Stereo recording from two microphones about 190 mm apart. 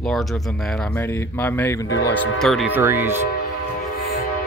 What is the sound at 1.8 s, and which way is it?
Speech, 70° left (ahead or behind).